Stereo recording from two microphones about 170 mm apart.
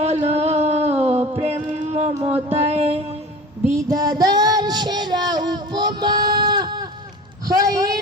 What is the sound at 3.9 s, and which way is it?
Child singing, 20° right (ahead or behind).